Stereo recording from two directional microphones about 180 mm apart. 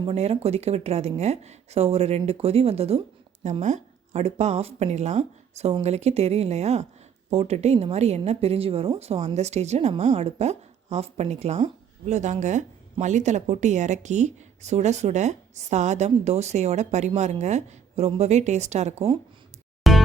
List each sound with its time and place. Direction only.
0.0 s speech: 35° right (ahead or behind)
19.9 s music: centre (ahead or behind)